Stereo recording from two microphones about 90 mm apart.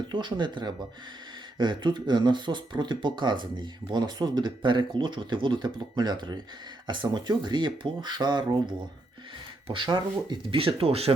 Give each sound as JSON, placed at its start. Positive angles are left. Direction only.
{"t": 0.1, "sound": "speech", "side_deg": -60}
{"t": 9.6, "sound": "speech", "side_deg": -70}